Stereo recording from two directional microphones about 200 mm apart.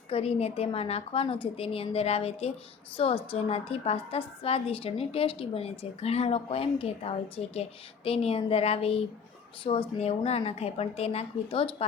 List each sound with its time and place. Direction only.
0.1 s a woman's voice: 30° left (ahead or behind)